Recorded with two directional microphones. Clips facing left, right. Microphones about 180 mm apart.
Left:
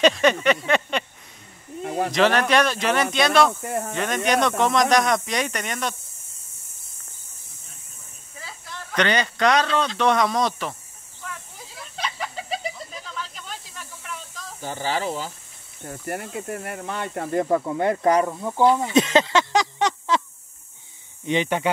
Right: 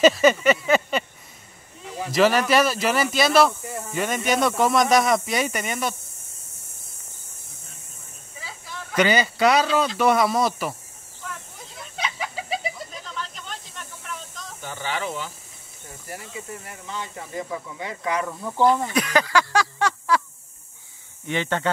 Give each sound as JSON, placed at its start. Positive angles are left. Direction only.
{"t": 0.0, "sound": "speech", "side_deg": -5}
{"t": 1.8, "sound": "a sound", "side_deg": 55}
{"t": 2.1, "sound": "speech", "side_deg": -5}
{"t": 3.6, "sound": "speech", "side_deg": 60}
{"t": 3.9, "sound": "speech", "side_deg": -5}
{"t": 8.4, "sound": "speech", "side_deg": 0}
{"t": 11.2, "sound": "a sound", "side_deg": 5}
{"t": 14.6, "sound": "speech", "side_deg": 35}
{"t": 15.8, "sound": "speech", "side_deg": 60}
{"t": 18.2, "sound": "speech", "side_deg": 20}
{"t": 18.9, "sound": "a sound", "side_deg": 25}
{"t": 21.3, "sound": "speech", "side_deg": 15}